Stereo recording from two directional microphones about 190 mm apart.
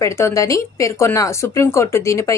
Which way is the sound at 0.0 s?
15° left (ahead or behind).